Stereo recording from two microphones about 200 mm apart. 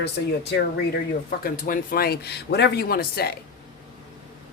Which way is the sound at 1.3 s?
45° left (ahead or behind).